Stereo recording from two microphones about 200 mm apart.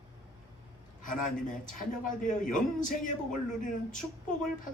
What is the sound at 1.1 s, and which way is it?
Speech, 40° left (ahead or behind).